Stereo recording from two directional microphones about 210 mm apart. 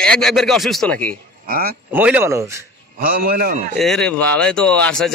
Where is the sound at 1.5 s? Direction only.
45° right (ahead or behind).